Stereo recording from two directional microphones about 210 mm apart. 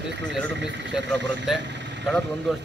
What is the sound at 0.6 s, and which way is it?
Speech, 55° right (ahead or behind).